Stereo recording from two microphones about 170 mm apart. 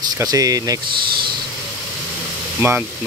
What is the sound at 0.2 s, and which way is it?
Speech, 20° right (ahead or behind).